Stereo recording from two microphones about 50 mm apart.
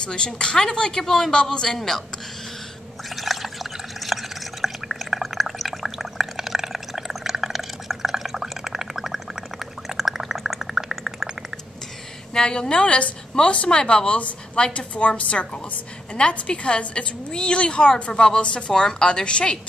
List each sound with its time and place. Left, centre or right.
0.0 s speech: centre
3.2 s liquid: centre
4.0 s drip: centre
9.8 s a sound: centre
12.4 s a woman's voice: centre